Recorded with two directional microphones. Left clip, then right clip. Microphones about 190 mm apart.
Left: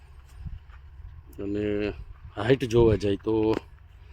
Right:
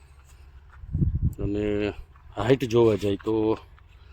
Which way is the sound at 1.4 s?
15° right (ahead or behind).